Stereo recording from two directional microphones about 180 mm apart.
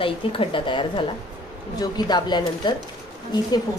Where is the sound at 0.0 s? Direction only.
30° left (ahead or behind).